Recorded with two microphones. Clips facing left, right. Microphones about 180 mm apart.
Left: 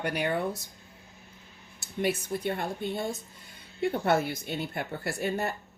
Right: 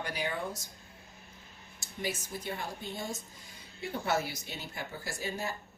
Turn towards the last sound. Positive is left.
turn(degrees=60)  # may be behind; listen again after turning